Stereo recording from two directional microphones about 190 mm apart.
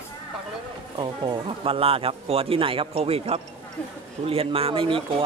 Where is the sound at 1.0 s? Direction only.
25° right (ahead or behind).